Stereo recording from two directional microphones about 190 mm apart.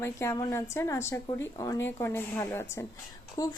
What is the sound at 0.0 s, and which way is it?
Speech, 15° left (ahead or behind).